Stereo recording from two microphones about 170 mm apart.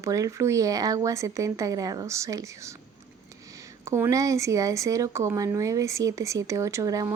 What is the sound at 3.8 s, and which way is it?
Speech, 15° right (ahead or behind).